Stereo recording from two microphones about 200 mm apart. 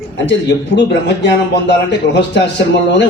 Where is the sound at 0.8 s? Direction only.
60° left (ahead or behind).